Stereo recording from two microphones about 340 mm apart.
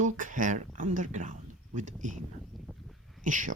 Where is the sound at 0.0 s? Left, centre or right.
Right.